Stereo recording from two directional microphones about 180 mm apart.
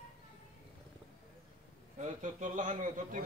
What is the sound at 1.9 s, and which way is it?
A man's voice, 40° right (ahead or behind).